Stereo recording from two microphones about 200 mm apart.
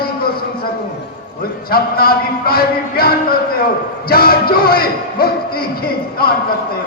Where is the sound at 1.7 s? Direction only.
50° left (ahead or behind).